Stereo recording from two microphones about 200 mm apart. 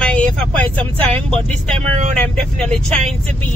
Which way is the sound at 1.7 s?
35° right (ahead or behind).